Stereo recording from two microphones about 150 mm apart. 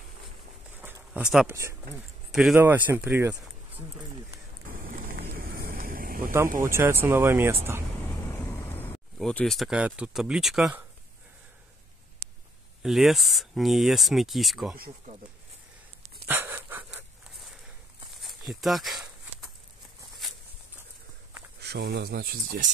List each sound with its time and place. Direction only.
0.7 s a sound: 10° right (ahead or behind)
1.5 s speech: 20° right (ahead or behind)
2.3 s speech: 5° right (ahead or behind)
4.6 s a sound: 65° right (ahead or behind)
5.3 s vehicle: 75° right (ahead or behind)
6.6 s speech: 20° right (ahead or behind)
8.3 s vehicle: 15° left (ahead or behind)
9.2 s speech: 5° left (ahead or behind)
12.8 s speech: centre (ahead or behind)
16.3 s dog: 15° right (ahead or behind)
18.2 s a sound: centre (ahead or behind)
21.5 s speech: 90° right